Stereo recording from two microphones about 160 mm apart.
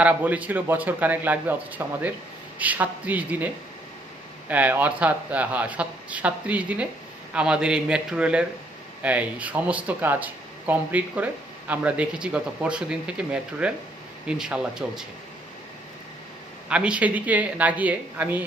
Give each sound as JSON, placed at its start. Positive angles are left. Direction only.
{"t": 0.0, "sound": "a man's voice", "side_deg": -10}
{"t": 16.6, "sound": "a man's voice", "side_deg": -5}